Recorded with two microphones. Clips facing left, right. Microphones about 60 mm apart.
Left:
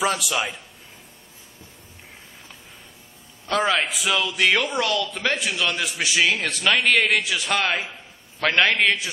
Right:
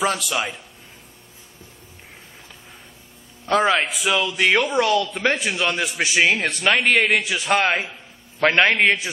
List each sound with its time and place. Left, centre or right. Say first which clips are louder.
0.0 s a man's voice: right 1 dB; centre
3.4 s a man's voice: right 3 dB; centre
5.2 s a man's voice: right 3 dB; centre
7.1 s a man's voice: right 3 dB; centre